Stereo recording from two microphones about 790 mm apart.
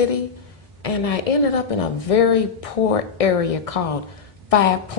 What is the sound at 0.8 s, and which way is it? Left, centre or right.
A woman's voice, left.